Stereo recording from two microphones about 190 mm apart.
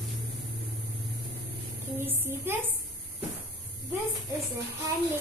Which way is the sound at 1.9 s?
10° right (ahead or behind).